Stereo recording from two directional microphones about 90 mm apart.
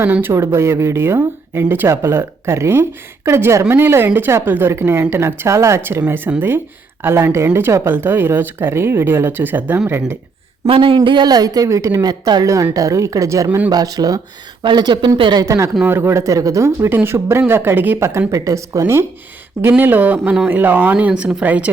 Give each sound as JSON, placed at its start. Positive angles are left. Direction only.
{"t": 0.0, "sound": "speech", "side_deg": -25}
{"t": 10.7, "sound": "speech", "side_deg": -90}
{"t": 10.9, "sound": "speech", "side_deg": -60}
{"t": 12.0, "sound": "speech", "side_deg": -50}
{"t": 13.7, "sound": "speech", "side_deg": -45}
{"t": 14.6, "sound": "speech", "side_deg": -55}
{"t": 15.4, "sound": "speech", "side_deg": -35}
{"t": 18.3, "sound": "speech", "side_deg": -40}
{"t": 19.6, "sound": "speech", "side_deg": -20}